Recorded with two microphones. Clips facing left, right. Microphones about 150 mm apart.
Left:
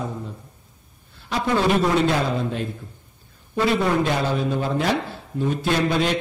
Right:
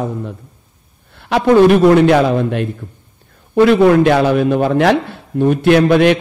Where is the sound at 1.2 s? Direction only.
65° right (ahead or behind).